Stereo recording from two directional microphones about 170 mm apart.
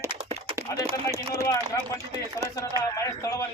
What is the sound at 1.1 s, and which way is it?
Speech, 20° left (ahead or behind).